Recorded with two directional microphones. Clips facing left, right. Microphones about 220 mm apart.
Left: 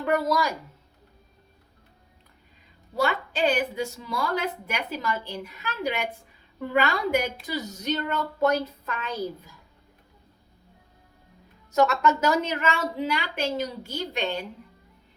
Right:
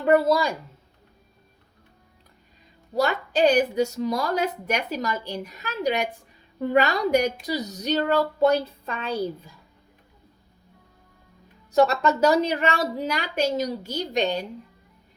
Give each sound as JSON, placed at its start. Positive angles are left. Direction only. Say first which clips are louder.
{"t": 0.0, "sound": "speech", "louder": "right 5 dB", "side_deg": -30}
{"t": 2.9, "sound": "a woman's voice", "louder": "right 3 dB", "side_deg": -40}
{"t": 11.7, "sound": "a woman's voice", "louder": "right 2 dB", "side_deg": -35}